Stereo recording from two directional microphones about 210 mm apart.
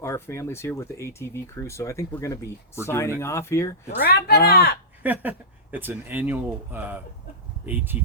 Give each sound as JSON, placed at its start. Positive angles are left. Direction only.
{"t": 0.0, "sound": "speech", "side_deg": 15}
{"t": 4.0, "sound": "speech", "side_deg": 50}
{"t": 5.0, "sound": "speech", "side_deg": -10}